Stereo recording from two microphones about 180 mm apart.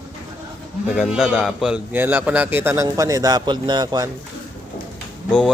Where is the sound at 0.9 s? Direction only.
5° right (ahead or behind); by 4.1 s 20° right (ahead or behind).